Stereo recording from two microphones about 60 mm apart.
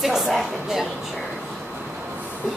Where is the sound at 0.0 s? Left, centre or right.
Centre.